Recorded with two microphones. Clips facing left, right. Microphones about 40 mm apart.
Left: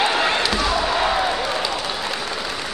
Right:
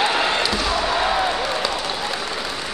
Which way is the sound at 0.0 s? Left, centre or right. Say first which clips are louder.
Even; centre.